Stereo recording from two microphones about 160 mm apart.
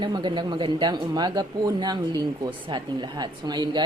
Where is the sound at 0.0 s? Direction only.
30° right (ahead or behind).